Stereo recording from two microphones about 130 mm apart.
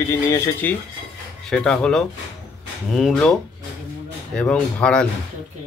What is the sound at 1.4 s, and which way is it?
Speech, 5° left (ahead or behind).